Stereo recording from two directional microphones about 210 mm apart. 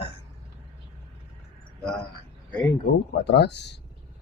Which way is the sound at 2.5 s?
5° left (ahead or behind).